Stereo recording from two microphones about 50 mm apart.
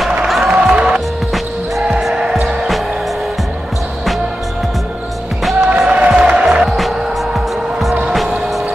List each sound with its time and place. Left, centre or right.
0.5 s music: centre
5.7 s music: right